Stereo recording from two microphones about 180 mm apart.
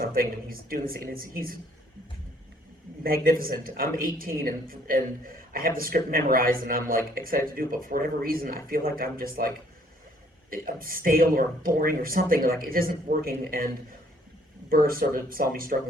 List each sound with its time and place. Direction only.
0.0 s speech: 55° right (ahead or behind)
3.2 s speech: 55° right (ahead or behind)
10.5 s speech: 55° right (ahead or behind)
14.7 s speech: 55° right (ahead or behind)